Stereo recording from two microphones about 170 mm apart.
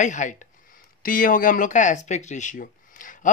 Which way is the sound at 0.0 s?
45° left (ahead or behind).